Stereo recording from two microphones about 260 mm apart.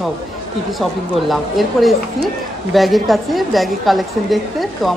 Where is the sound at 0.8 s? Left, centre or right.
Centre.